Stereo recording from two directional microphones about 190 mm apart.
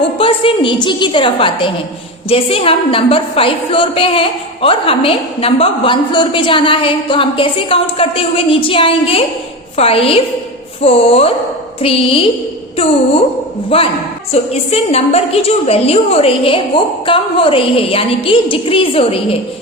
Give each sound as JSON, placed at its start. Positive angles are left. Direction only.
{"t": 0.2, "sound": "a woman's voice", "side_deg": 30}
{"t": 13.7, "sound": "a woman's voice", "side_deg": 30}